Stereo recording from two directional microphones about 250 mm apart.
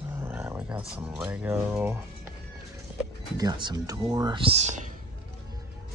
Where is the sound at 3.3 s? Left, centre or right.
Centre.